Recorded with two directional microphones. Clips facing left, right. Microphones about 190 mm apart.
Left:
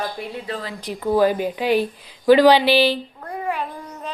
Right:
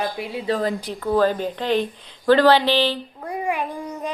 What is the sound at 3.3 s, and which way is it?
Child singing, 15° right (ahead or behind).